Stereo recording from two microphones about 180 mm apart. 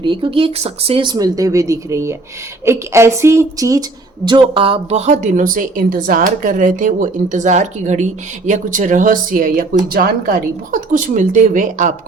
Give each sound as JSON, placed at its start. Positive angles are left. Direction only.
{"t": 0.0, "sound": "a woman's voice", "side_deg": -25}